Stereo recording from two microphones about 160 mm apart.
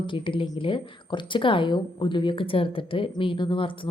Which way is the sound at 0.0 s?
30° left (ahead or behind).